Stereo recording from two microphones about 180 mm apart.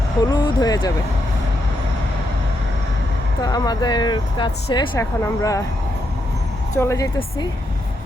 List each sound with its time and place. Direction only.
0.3 s speech: 20° left (ahead or behind)
3.4 s speech: 20° left (ahead or behind)
6.7 s speech: 15° left (ahead or behind)